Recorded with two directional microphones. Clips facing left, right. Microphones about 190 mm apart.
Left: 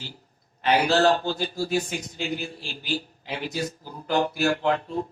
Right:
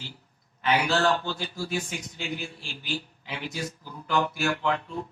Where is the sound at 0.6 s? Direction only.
35° left (ahead or behind).